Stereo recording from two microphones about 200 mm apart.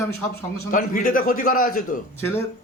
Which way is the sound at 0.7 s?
40° left (ahead or behind).